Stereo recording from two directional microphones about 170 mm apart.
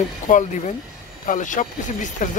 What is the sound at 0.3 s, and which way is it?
Speech, 50° left (ahead or behind).